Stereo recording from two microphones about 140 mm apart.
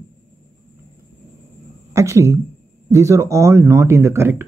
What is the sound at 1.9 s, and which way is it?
Speech, 20° right (ahead or behind).